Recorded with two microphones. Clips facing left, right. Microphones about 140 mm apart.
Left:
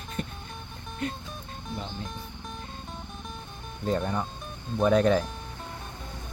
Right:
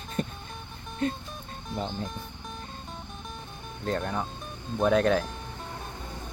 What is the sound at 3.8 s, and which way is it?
Speech, centre (ahead or behind).